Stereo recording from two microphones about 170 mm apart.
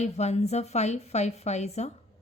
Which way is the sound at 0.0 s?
40° left (ahead or behind).